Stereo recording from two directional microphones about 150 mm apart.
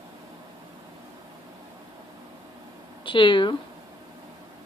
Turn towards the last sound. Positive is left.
turn(degrees=35)  # may be behind; listen again after turning